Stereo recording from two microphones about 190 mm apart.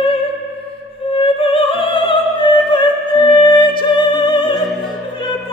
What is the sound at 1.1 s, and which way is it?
Opera, 30° left (ahead or behind).